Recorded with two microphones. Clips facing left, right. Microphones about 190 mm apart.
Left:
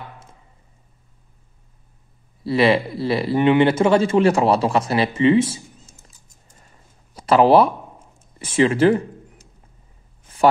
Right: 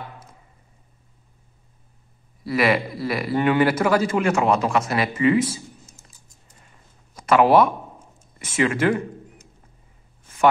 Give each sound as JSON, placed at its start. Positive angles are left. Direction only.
{"t": 2.4, "sound": "a man's voice", "side_deg": 30}
{"t": 7.2, "sound": "speech", "side_deg": 30}